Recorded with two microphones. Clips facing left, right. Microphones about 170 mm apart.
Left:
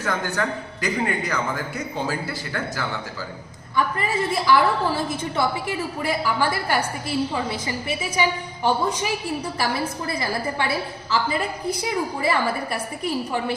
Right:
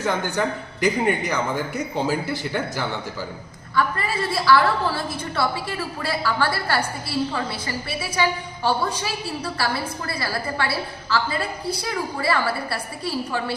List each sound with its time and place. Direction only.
0.0 s a man's voice: 15° right (ahead or behind)
3.8 s a woman's voice: 15° left (ahead or behind)